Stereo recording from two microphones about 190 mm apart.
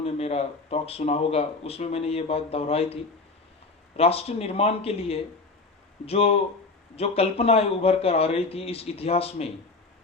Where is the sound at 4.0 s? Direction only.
30° left (ahead or behind).